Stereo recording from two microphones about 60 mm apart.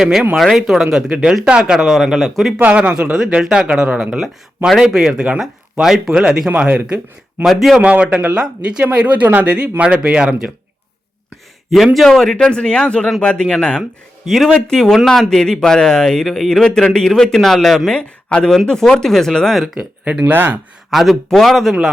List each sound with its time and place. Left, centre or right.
0.0 s speech: centre
2.1 s a man's voice: centre
2.6 s speech: right
7.4 s a man's voice: centre
7.8 s speech: right
11.9 s speech: centre
14.3 s speech: centre
20.1 s speech: right
20.9 s a man's voice: centre